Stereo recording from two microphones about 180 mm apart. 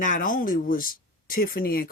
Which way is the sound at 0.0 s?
45° left (ahead or behind).